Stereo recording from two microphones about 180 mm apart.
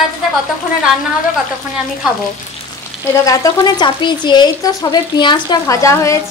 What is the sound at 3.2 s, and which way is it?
A woman's voice, 20° left (ahead or behind).